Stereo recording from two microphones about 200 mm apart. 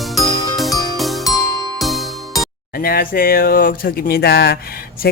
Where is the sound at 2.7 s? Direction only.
45° left (ahead or behind).